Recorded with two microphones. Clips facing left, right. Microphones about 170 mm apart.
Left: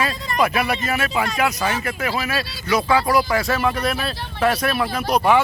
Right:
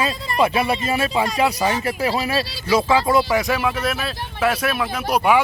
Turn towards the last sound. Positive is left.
turn(degrees=-10)  # may be behind; listen again after turning